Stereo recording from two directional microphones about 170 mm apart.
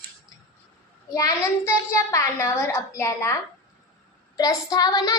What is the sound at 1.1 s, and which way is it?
A child's voice, 20° left (ahead or behind).